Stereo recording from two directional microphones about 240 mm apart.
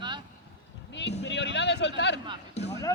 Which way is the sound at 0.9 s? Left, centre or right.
Left.